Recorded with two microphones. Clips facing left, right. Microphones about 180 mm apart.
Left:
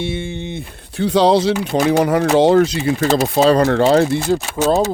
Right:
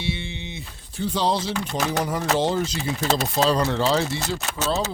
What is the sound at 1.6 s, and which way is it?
Speech, 65° left (ahead or behind).